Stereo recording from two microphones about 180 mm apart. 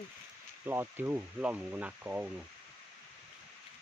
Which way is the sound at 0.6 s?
10° right (ahead or behind).